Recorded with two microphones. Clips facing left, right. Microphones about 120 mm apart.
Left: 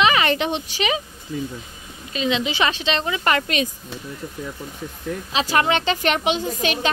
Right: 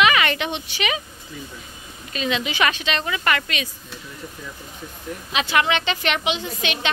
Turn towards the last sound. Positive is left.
turn(degrees=40)  # may be behind; listen again after turning